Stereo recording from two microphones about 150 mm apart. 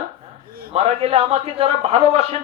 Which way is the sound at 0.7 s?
40° right (ahead or behind).